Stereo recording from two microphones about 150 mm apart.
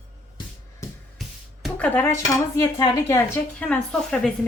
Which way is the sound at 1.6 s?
10° left (ahead or behind).